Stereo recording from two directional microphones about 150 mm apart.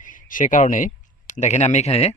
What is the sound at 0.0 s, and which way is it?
Speech, 60° left (ahead or behind).